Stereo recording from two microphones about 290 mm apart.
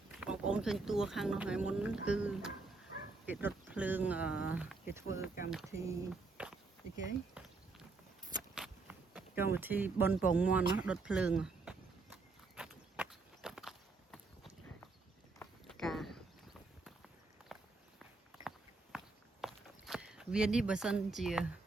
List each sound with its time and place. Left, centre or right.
0.2 s speech: centre
7.4 s a sound: centre
8.5 s speech: centre
12.5 s walk: centre
17.5 s walk: centre